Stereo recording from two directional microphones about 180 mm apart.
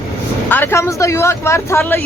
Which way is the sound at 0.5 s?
15° left (ahead or behind).